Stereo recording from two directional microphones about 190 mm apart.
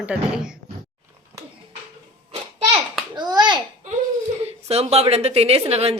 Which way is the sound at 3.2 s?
25° right (ahead or behind).